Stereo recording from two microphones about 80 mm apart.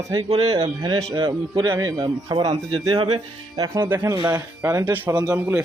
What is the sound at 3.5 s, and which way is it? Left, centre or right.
Speech, right.